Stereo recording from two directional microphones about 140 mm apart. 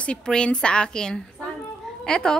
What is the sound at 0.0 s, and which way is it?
A woman's voice, 5° left (ahead or behind).